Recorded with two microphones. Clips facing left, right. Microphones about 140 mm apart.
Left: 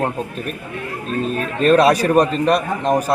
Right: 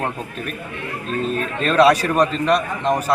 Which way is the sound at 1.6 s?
45° left (ahead or behind).